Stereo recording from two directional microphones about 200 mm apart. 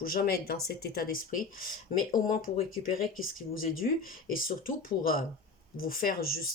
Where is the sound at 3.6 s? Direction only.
45° left (ahead or behind).